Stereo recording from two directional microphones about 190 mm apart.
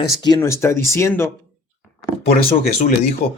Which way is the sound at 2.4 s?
35° left (ahead or behind).